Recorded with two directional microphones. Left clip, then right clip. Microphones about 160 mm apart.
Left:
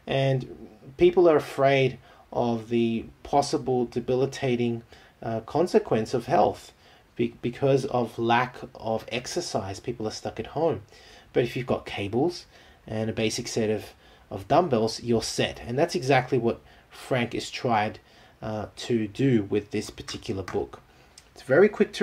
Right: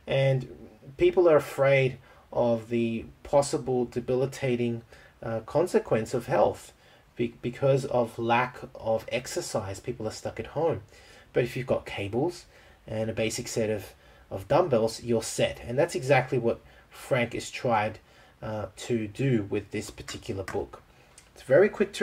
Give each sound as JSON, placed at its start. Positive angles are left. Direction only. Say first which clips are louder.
{"t": 0.0, "sound": "speech", "louder": "even", "side_deg": 35}
{"t": 21.5, "sound": "speech", "louder": "left 1 dB", "side_deg": 30}